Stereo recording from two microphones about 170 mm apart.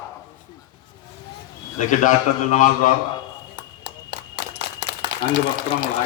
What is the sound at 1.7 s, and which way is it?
A man's voice, 50° left (ahead or behind).